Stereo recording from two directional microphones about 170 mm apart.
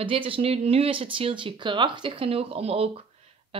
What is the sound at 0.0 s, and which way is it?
Speech, 30° right (ahead or behind).